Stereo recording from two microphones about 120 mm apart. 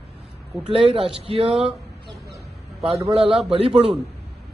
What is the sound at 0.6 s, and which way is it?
A man's voice, 45° right (ahead or behind).